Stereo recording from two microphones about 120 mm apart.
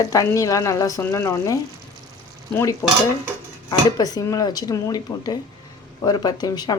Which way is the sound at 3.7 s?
35° left (ahead or behind).